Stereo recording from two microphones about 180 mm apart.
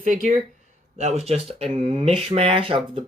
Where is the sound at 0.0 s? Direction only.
45° right (ahead or behind).